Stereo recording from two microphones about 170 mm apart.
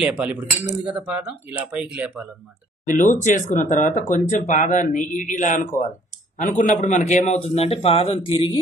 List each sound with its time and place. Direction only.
0.0 s speech: 10° right (ahead or behind)
2.9 s a man's voice: 45° left (ahead or behind); by 8.5 s 30° left (ahead or behind)